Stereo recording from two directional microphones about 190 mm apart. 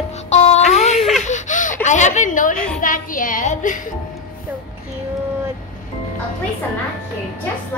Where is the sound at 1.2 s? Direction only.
40° left (ahead or behind).